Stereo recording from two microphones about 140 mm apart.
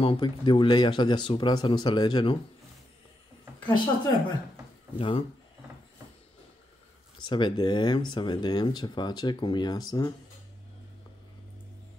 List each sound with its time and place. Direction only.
0.0 s speech: 35° left (ahead or behind)
3.5 s a sound: 35° left (ahead or behind)
4.9 s speech: 40° left (ahead or behind)
7.2 s speech: 35° left (ahead or behind)